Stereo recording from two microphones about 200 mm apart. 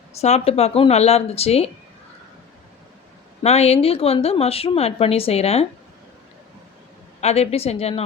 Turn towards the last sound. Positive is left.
turn(degrees=30)  # may be behind; listen again after turning